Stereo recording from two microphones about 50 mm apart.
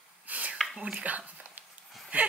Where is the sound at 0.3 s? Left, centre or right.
Right.